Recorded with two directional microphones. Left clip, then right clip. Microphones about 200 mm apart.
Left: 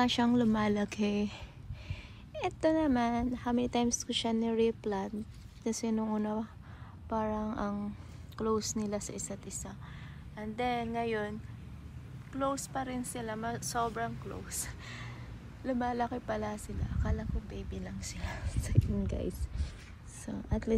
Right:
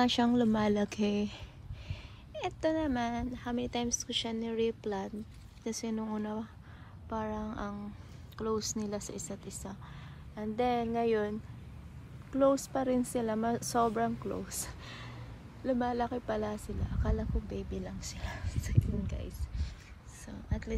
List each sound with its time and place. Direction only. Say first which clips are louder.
0.0 s a woman's voice: right 1 dB; 15° right (ahead or behind); by 20.7 s centre (ahead or behind)